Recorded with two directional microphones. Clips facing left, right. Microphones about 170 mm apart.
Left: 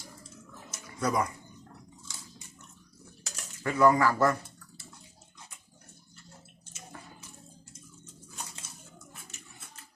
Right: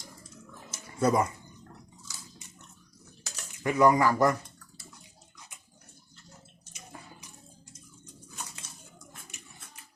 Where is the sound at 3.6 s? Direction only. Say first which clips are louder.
Right 1 dB; 15° right (ahead or behind).